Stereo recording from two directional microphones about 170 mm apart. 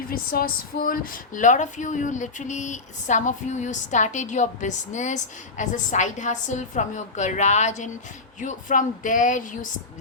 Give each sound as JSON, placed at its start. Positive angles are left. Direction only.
{"t": 0.1, "sound": "speech", "side_deg": 60}